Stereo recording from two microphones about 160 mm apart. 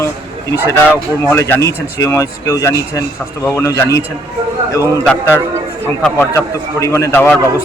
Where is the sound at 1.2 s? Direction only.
15° left (ahead or behind).